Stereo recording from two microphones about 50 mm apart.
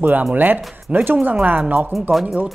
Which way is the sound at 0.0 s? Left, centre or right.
Right.